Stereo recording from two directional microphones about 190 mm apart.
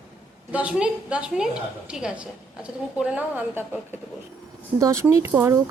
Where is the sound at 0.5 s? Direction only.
5° right (ahead or behind).